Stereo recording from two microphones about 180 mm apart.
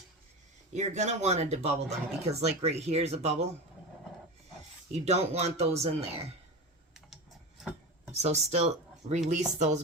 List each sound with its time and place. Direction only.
0.7 s speech: 40° right (ahead or behind)
4.9 s speech: 35° right (ahead or behind)
7.6 s chopping: 5° right (ahead or behind)
8.1 s speech: 35° right (ahead or behind)